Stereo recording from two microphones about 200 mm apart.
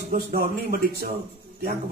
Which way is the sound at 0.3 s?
50° right (ahead or behind).